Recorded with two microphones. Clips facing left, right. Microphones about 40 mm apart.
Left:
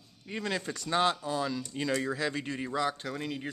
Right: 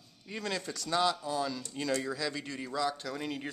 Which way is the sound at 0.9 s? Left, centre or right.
Left.